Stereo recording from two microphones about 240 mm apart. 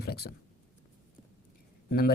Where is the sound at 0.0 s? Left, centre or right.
Left.